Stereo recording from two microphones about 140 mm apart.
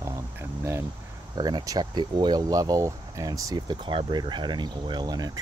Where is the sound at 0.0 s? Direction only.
20° right (ahead or behind).